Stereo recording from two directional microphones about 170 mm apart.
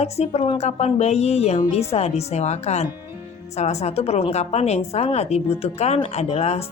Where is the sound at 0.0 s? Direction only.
35° left (ahead or behind).